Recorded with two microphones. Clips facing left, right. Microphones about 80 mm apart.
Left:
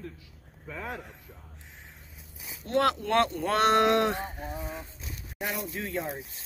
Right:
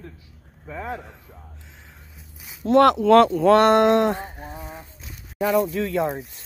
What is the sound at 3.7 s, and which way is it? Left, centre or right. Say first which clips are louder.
Speech: right 6 dB; right.